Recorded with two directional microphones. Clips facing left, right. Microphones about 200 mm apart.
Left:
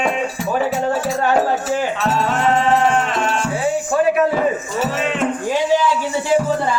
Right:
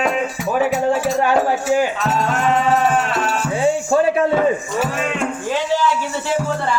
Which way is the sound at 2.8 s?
5° right (ahead or behind).